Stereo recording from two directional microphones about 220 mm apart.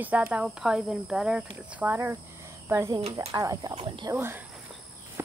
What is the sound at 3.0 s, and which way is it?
Speech, 25° right (ahead or behind).